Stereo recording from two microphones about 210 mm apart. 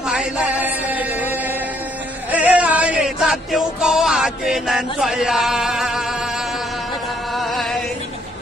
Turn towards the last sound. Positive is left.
turn(degrees=0)  # may be behind; listen again after turning